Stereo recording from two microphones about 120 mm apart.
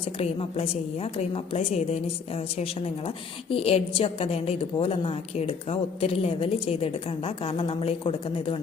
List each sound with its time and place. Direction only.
0.2 s a woman's voice: 55° left (ahead or behind)